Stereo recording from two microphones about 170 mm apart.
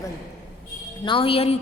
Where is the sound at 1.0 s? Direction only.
30° left (ahead or behind).